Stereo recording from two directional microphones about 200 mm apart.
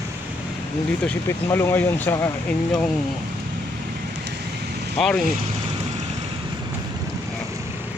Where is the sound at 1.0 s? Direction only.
10° left (ahead or behind).